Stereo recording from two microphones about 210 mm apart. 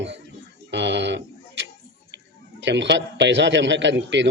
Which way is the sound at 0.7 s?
55° right (ahead or behind).